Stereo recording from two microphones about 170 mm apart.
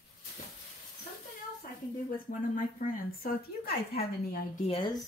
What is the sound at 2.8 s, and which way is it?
A woman's voice, 55° left (ahead or behind).